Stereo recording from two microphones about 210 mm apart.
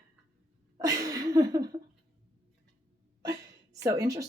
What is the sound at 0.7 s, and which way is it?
Speech, 15° right (ahead or behind).